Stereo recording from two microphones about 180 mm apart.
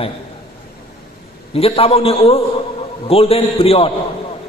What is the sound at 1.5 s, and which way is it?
A man's voice, 35° left (ahead or behind).